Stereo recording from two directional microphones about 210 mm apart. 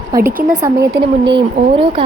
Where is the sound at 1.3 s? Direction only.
25° right (ahead or behind).